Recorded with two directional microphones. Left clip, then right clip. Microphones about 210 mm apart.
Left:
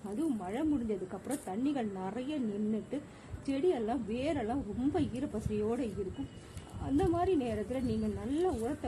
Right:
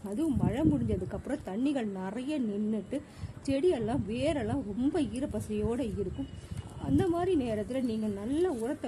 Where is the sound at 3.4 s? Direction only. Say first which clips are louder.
Right 3 dB; 40° right (ahead or behind).